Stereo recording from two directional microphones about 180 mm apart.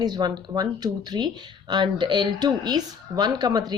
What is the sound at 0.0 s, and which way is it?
Speech, 25° right (ahead or behind).